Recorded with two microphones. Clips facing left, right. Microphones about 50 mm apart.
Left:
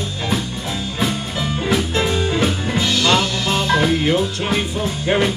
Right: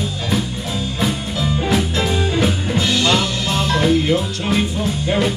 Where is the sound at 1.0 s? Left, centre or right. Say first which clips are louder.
Even; centre.